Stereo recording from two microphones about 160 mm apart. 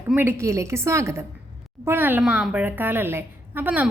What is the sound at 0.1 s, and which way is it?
A child's voice, 15° right (ahead or behind).